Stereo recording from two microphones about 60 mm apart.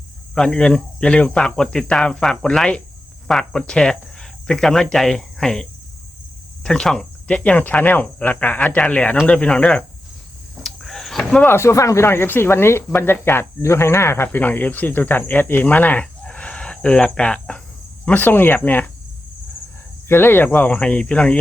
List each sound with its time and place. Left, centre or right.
0.3 s speech: centre
3.5 s cricket: centre
6.6 s speech: centre
7.3 s speech: centre
10.6 s a sound: centre
11.4 s speech: left
12.0 s speech: left
16.2 s chicken: centre
18.0 s speech: left
20.1 s speech: left; by 21.3 s centre